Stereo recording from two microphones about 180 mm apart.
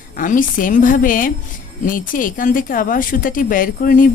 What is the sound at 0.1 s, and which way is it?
A woman's voice, 50° left (ahead or behind).